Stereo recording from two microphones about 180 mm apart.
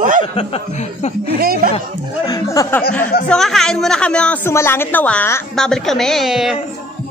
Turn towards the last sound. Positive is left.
turn(degrees=0)  # may be behind; listen again after turning